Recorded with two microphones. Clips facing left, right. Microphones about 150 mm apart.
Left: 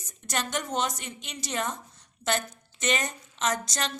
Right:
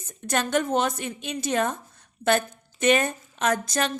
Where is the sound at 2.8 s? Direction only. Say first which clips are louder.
Right 8 dB; 50° right (ahead or behind).